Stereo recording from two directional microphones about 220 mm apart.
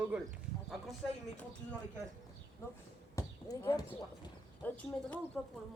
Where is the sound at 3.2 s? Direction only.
15° left (ahead or behind).